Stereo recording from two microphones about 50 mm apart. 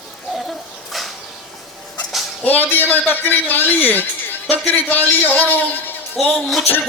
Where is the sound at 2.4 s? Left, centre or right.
Left.